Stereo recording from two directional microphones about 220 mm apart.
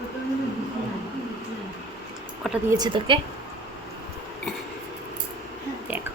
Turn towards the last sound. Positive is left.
turn(degrees=-10)  # may be behind; listen again after turning